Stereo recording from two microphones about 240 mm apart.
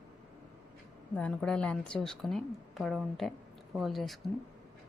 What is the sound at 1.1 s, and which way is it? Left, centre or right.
A woman's voice, centre.